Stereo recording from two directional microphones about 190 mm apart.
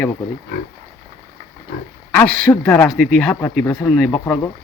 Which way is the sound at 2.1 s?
10° left (ahead or behind).